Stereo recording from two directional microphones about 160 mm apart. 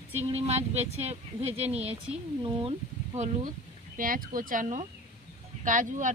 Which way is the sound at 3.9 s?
60° right (ahead or behind).